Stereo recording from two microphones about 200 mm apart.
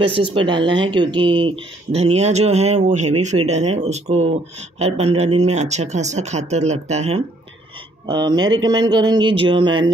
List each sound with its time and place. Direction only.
0.0 s speech: 25° right (ahead or behind)
8.1 s speech: 20° right (ahead or behind)